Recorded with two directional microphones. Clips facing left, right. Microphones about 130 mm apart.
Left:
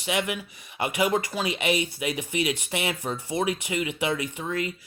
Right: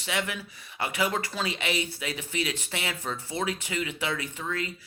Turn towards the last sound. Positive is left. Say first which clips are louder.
# left 4 dB
turn(degrees=15)  # may be behind; listen again after turning